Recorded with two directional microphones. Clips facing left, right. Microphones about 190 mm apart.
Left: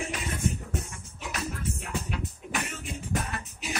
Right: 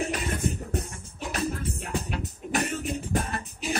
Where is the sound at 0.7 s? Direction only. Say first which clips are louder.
Right 4 dB; 35° right (ahead or behind).